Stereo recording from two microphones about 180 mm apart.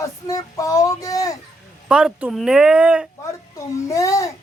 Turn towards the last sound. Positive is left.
turn(degrees=20)  # may be behind; listen again after turning